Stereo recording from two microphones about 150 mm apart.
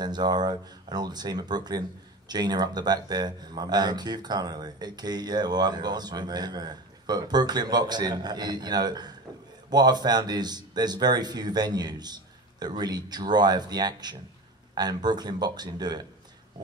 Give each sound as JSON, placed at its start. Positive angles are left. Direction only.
{"t": 0.0, "sound": "speech", "side_deg": -30}